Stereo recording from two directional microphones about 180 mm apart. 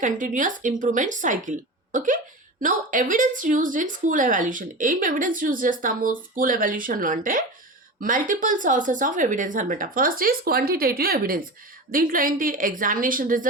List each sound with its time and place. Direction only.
0.0 s a woman's voice: 45° right (ahead or behind)